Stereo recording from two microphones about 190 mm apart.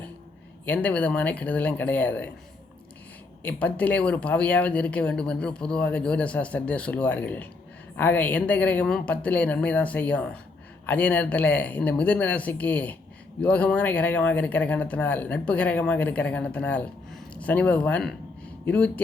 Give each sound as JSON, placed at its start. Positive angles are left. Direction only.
{"t": 0.6, "sound": "speech", "side_deg": 10}
{"t": 3.4, "sound": "speech", "side_deg": 10}